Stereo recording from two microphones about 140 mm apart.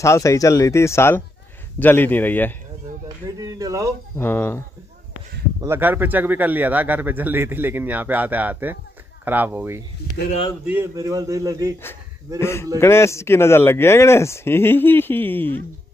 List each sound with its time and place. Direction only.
0.0 s speech: 20° left (ahead or behind)
3.3 s a man's voice: 25° right (ahead or behind)
4.2 s speech: 15° left (ahead or behind)
5.6 s a man's voice: 15° right (ahead or behind)
12.4 s speech: 20° left (ahead or behind)